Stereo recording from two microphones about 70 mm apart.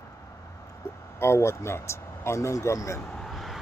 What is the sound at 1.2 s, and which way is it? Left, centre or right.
Speech, left.